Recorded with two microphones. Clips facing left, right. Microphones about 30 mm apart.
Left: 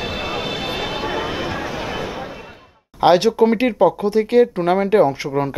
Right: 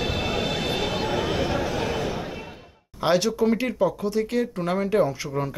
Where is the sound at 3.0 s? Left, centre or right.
Left.